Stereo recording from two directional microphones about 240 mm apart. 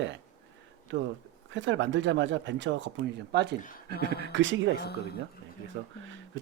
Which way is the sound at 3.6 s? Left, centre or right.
Left.